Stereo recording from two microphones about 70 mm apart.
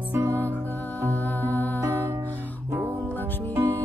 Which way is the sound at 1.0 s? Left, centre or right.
Left.